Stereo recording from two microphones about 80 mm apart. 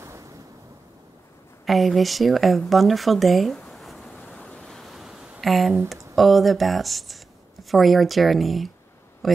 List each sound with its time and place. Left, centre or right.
0.0 s waves: right
1.7 s speech: centre
4.3 s a sound: centre
5.5 s speech: centre